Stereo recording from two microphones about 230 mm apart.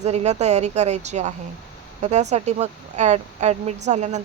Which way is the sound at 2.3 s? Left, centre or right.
Right.